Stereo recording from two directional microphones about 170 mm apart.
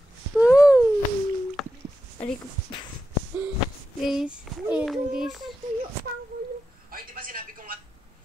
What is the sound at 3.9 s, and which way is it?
A child's voice, 5° right (ahead or behind).